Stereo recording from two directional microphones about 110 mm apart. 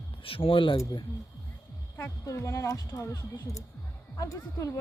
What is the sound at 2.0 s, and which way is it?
Speech, 25° left (ahead or behind).